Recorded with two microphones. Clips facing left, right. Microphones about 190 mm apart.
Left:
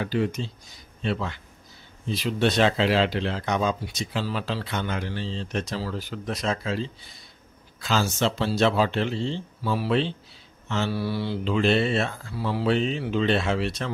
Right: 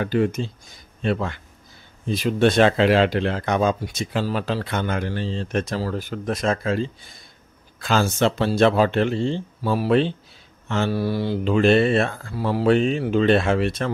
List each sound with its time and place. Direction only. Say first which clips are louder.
0.0 s speech: right 5 dB; 50° right (ahead or behind)